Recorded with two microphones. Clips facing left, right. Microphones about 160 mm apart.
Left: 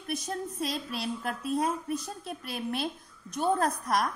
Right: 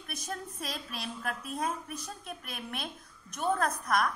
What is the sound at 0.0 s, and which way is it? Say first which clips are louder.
A woman's voice: left 6 dB; 30° left (ahead or behind).